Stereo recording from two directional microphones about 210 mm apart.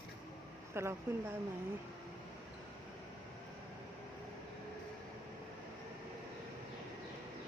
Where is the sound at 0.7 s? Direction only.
10° right (ahead or behind).